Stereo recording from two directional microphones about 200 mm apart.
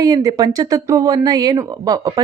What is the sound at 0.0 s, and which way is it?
A woman's voice, 20° right (ahead or behind).